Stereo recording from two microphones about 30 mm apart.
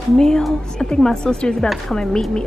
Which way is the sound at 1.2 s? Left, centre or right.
Left.